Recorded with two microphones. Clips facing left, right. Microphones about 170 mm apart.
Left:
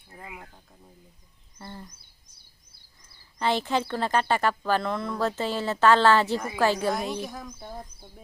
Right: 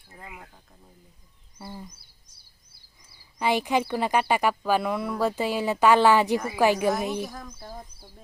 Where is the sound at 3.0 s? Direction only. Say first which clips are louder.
Right 1 dB; 10° right (ahead or behind).